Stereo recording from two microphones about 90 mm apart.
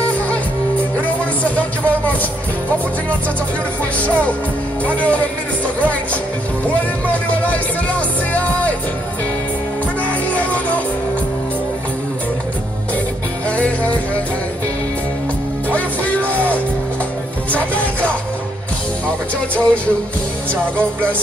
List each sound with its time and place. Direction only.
1.0 s music: 15° left (ahead or behind)
4.0 s speech: 15° left (ahead or behind)
6.7 s speech: 15° left (ahead or behind)
8.3 s music: 15° left (ahead or behind)
10.0 s music: 15° left (ahead or behind)
13.5 s music: 15° left (ahead or behind)
15.7 s music: 15° left (ahead or behind)
17.5 s music: 15° left (ahead or behind)
19.5 s speech: 15° left (ahead or behind)